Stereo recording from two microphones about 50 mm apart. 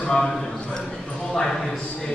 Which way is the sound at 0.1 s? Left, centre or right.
Centre.